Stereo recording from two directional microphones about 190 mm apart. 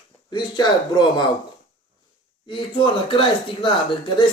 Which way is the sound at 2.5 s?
25° left (ahead or behind).